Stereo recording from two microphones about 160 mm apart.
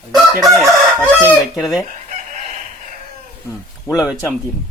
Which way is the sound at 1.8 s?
50° right (ahead or behind).